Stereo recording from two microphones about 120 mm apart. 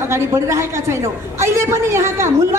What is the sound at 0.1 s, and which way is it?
A woman's voice, 25° right (ahead or behind).